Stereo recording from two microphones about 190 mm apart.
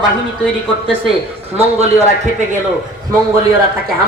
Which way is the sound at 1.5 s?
35° right (ahead or behind).